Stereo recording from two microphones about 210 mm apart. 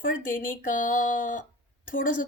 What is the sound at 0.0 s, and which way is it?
A woman's voice, 40° left (ahead or behind).